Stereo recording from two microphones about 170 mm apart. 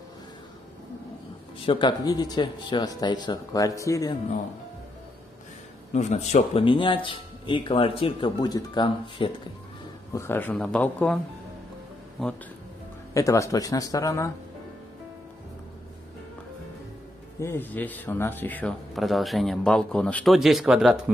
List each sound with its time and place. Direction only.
1.7 s speech: 25° left (ahead or behind)
5.9 s a man's voice: 45° left (ahead or behind)
10.1 s speech: 15° left (ahead or behind)
12.2 s speech: centre (ahead or behind)
13.1 s speech: 20° left (ahead or behind)
17.4 s speech: 15° left (ahead or behind); by 21.0 s 5° right (ahead or behind)